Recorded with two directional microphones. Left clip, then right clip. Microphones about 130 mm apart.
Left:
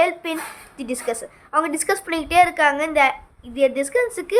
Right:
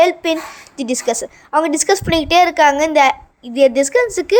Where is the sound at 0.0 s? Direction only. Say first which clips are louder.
Right 7 dB; 40° right (ahead or behind).